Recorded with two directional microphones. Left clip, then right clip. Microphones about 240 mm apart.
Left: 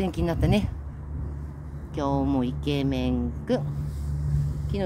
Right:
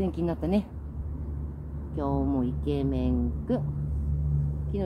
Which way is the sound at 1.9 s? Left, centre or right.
Left.